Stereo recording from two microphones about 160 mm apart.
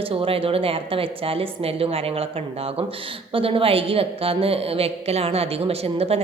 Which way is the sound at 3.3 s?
35° right (ahead or behind).